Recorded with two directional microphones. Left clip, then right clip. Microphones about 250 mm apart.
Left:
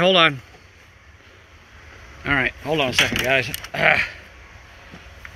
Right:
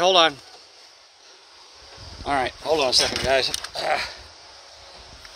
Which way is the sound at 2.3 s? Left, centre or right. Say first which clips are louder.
Left 1 dB; centre.